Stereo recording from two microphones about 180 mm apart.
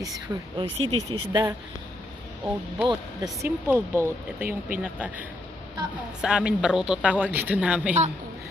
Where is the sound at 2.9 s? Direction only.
20° right (ahead or behind).